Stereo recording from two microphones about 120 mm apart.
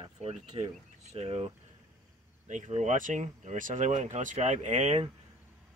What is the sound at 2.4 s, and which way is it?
Speech, 90° right.